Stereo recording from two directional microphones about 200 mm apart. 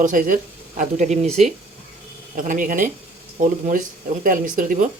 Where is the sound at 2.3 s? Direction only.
40° right (ahead or behind).